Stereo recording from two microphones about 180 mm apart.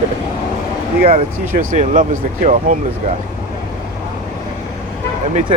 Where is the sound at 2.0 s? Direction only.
45° right (ahead or behind).